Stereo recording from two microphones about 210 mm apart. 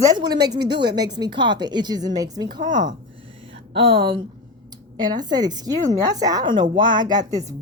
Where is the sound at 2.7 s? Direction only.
35° right (ahead or behind).